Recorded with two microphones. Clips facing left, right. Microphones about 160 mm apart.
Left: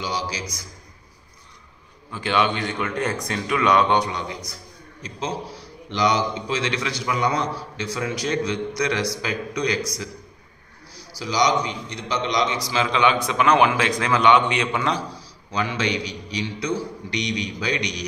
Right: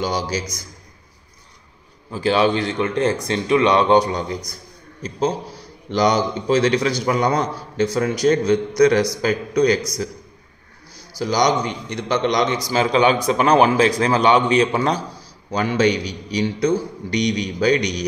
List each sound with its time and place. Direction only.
0.0 s a man's voice: 45° right (ahead or behind)
2.0 s a man's voice: 35° right (ahead or behind)